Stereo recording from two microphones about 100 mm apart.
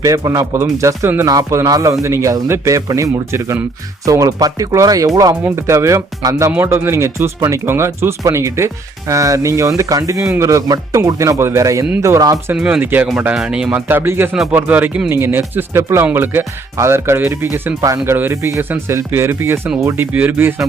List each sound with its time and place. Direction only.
0.0 s a man's voice: 35° right (ahead or behind)
12.5 s speech: 10° right (ahead or behind)
12.8 s speech: 20° right (ahead or behind)
13.3 s speech: 10° right (ahead or behind)
17.7 s a man's voice: 35° right (ahead or behind)